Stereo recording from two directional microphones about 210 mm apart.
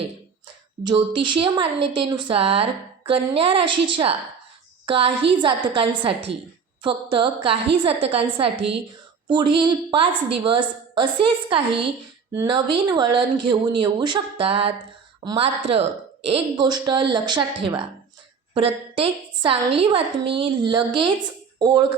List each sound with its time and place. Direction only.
0.9 s a woman's voice: 20° right (ahead or behind)